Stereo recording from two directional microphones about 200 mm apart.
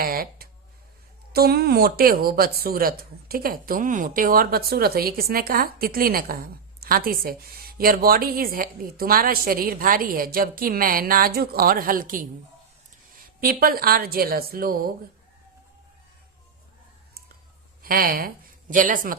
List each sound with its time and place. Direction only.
0.0 s a sound: 45° right (ahead or behind)
1.3 s speech: 50° right (ahead or behind)
13.4 s speech: 50° right (ahead or behind)
17.8 s speech: 45° right (ahead or behind)